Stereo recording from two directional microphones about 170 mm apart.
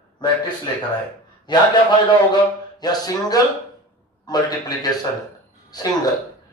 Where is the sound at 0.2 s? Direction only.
25° left (ahead or behind).